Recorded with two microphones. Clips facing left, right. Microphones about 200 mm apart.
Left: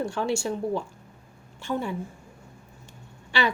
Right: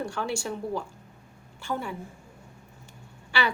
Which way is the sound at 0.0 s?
25° left (ahead or behind).